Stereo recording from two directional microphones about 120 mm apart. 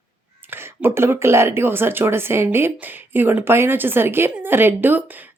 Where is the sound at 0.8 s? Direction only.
20° right (ahead or behind).